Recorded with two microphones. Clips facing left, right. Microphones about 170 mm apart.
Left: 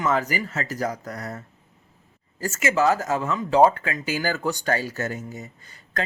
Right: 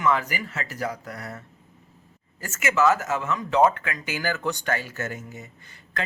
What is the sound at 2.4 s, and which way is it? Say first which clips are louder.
Speech: left 1 dB; 35° left (ahead or behind).